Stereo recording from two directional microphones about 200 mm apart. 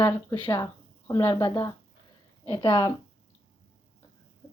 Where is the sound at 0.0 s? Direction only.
20° left (ahead or behind).